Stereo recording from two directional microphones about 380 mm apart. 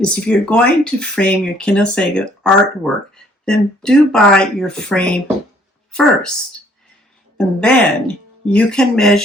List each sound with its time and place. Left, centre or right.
0.0 s speech: centre
7.3 s speech: centre